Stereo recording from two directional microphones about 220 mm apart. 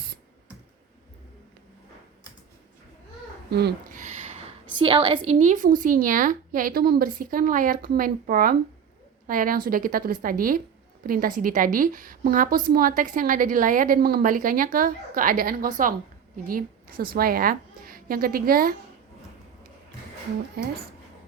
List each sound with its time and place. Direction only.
3.5 s speech: 50° right (ahead or behind)
4.0 s a sound: 30° right (ahead or behind)
5.3 s a woman's voice: 35° right (ahead or behind)
20.6 s speech: 45° right (ahead or behind)